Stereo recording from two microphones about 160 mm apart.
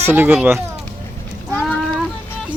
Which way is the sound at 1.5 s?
5° left (ahead or behind).